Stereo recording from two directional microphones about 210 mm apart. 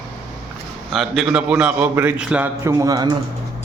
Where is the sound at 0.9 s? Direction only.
Centre (ahead or behind); by 3.2 s 20° right (ahead or behind).